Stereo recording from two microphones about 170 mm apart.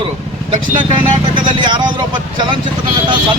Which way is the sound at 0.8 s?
25° right (ahead or behind).